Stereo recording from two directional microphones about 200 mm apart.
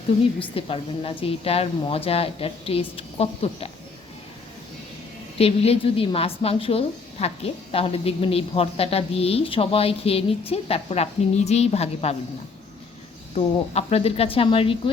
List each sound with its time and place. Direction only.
0.5 s a woman's voice: 25° left (ahead or behind)
5.4 s a woman's voice: 30° left (ahead or behind)
13.3 s a woman's voice: 30° left (ahead or behind)